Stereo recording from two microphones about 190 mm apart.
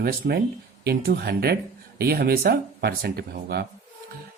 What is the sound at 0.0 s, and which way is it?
Speech, 55° right (ahead or behind).